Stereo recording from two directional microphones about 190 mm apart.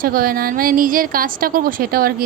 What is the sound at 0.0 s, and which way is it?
A woman's voice, 50° right (ahead or behind).